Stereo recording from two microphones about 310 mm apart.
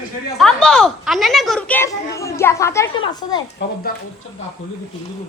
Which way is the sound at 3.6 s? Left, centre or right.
Left.